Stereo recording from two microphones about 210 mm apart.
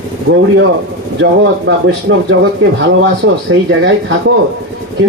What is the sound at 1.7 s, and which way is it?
Speech, 65° right (ahead or behind).